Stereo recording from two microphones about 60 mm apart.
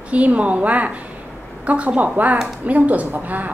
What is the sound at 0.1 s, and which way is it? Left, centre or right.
A woman's voice, right.